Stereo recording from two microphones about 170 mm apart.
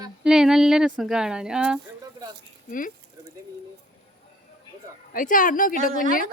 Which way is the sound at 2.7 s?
50° left (ahead or behind).